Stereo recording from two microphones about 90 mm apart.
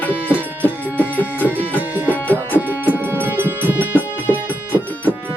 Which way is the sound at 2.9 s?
20° right (ahead or behind).